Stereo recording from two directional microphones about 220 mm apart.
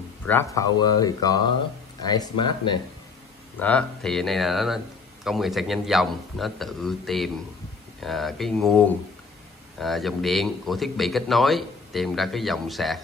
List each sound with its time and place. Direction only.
0.3 s speech: 10° left (ahead or behind)
3.5 s speech: 5° left (ahead or behind)